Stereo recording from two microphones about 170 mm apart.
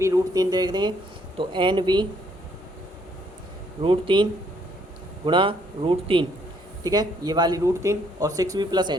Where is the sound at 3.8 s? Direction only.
30° right (ahead or behind).